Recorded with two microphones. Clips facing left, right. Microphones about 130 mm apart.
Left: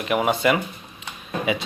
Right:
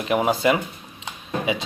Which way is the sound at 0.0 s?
35° right (ahead or behind).